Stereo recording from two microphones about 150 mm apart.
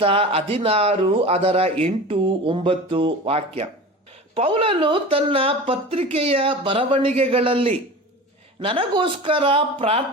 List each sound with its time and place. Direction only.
0.0 s speech: 35° right (ahead or behind)